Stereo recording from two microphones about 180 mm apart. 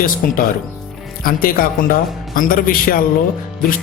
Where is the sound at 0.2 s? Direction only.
50° left (ahead or behind).